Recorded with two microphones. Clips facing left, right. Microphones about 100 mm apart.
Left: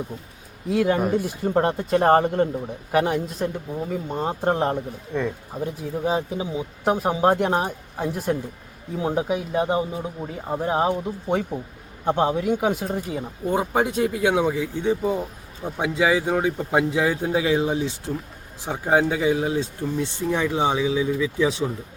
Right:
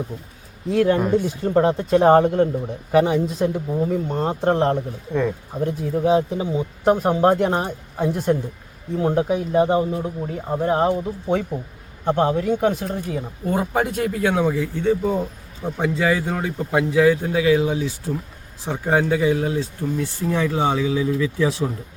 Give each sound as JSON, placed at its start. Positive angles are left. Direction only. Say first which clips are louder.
{"t": 0.7, "sound": "a man's voice", "louder": "right 3 dB", "side_deg": 5}
{"t": 18.6, "sound": "speech", "louder": "even", "side_deg": 15}